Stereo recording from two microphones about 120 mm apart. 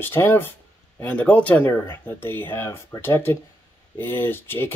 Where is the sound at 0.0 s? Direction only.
20° left (ahead or behind).